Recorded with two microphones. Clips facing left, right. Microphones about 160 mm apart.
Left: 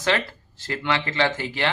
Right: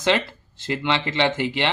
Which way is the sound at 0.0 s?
20° right (ahead or behind).